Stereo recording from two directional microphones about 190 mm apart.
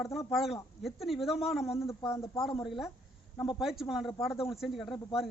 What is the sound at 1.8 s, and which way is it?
Speech, 15° left (ahead or behind).